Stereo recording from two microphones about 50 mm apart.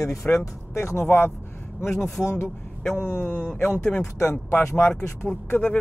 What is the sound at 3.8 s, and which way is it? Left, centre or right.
Speech, centre.